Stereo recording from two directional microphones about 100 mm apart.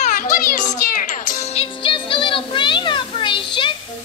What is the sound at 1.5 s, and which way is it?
Music, 75° left (ahead or behind).